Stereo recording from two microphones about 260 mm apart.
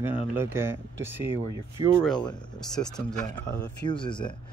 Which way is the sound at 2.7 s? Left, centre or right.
Centre.